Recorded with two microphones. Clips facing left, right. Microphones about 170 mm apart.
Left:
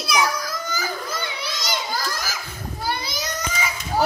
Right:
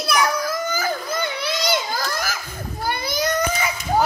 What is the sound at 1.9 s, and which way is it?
Crowd, 55° right (ahead or behind).